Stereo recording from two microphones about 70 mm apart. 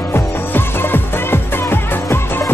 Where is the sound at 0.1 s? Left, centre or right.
Left.